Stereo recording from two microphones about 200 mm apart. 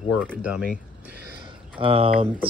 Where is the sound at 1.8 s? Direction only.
25° right (ahead or behind).